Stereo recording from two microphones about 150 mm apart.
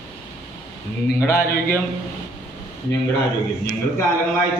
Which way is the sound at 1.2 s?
15° left (ahead or behind).